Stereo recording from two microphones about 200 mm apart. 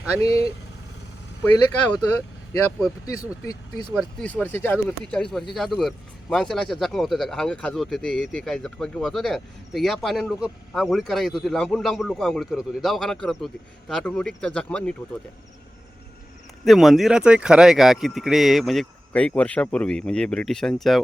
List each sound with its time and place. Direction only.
0.2 s speech: 30° right (ahead or behind)
1.5 s speech: 10° left (ahead or behind)
4.2 s speech: 5° left (ahead or behind)
16.6 s speech: centre (ahead or behind)